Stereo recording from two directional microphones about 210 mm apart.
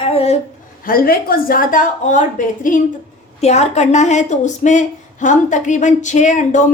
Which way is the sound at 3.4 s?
30° left (ahead or behind).